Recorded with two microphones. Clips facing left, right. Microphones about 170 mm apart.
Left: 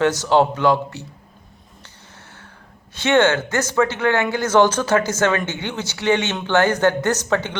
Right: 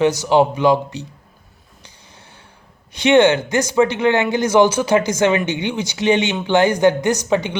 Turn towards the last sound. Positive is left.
turn(degrees=-15)  # may be behind; listen again after turning